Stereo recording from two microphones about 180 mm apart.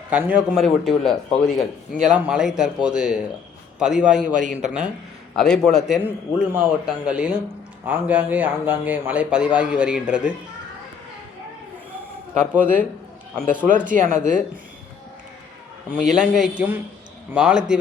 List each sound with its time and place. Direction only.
0.1 s speech: 10° right (ahead or behind)
4.4 s speech: 45° right (ahead or behind)
5.4 s speech: 5° left (ahead or behind)
6.0 s speech: 10° right (ahead or behind)
12.4 s speech: 5° right (ahead or behind)
13.7 s speech: 45° right (ahead or behind)
15.9 s speech: 5° right (ahead or behind)